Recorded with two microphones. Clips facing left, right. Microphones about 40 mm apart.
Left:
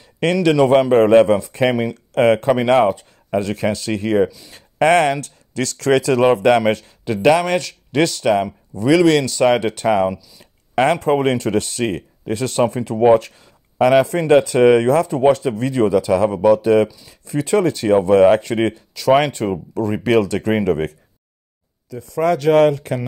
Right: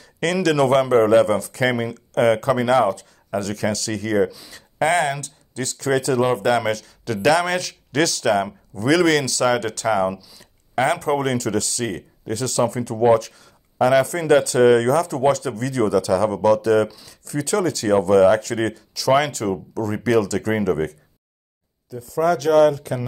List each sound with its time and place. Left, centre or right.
0.2 s speech: centre
0.9 s speech: left
2.9 s speech: left
4.5 s a sound: left
4.8 s speech: left
6.6 s speech: left
7.4 s speech: centre
9.5 s speech: left
10.4 s a sound: left
11.1 s speech: left
21.9 s speech: left